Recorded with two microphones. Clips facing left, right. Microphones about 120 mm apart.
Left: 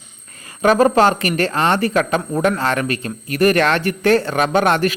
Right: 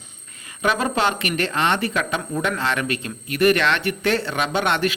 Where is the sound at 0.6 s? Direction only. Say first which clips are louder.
Left 8 dB; 40° left (ahead or behind).